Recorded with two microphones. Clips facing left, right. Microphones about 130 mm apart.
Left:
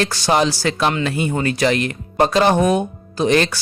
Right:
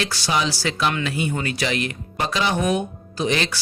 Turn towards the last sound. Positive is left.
turn(degrees=45)  # may be behind; listen again after turning